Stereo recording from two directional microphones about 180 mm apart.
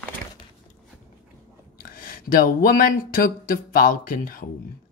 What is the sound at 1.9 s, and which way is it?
Speech, 50° left (ahead or behind).